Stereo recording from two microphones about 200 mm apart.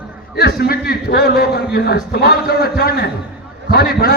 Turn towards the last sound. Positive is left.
turn(degrees=50)  # may be behind; listen again after turning